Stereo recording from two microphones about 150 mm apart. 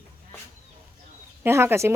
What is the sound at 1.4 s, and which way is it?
Speech, 15° right (ahead or behind).